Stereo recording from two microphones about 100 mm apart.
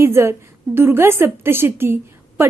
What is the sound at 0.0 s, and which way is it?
A woman's voice, 25° right (ahead or behind).